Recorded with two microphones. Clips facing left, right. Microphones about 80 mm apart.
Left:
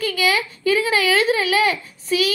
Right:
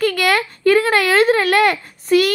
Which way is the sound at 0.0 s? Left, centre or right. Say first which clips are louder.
Right 4 dB; right.